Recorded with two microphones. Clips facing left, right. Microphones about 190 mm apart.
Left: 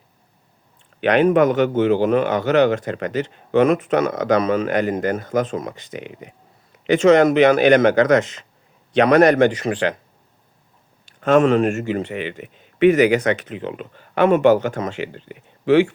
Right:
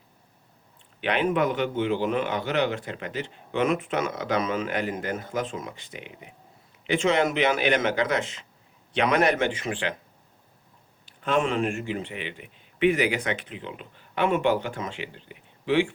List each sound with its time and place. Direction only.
1.4 s speech: 45° left (ahead or behind)
1.6 s a man's voice: 70° left (ahead or behind)
1.9 s a man's voice: 45° left (ahead or behind)
11.0 s a sound: 45° left (ahead or behind)
11.8 s speech: 45° left (ahead or behind)
13.7 s speech: 60° left (ahead or behind)
14.3 s speech: 40° left (ahead or behind)
15.0 s speech: 55° left (ahead or behind)